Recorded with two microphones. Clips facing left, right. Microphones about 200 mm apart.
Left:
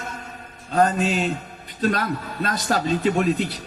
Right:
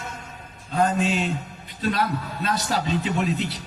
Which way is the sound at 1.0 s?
40° left (ahead or behind).